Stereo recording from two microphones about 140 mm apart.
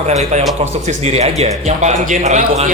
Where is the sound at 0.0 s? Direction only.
50° right (ahead or behind).